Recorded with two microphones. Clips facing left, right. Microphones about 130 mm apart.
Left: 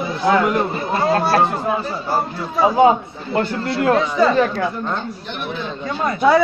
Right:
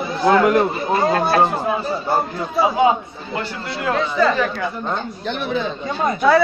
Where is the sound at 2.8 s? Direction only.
40° left (ahead or behind).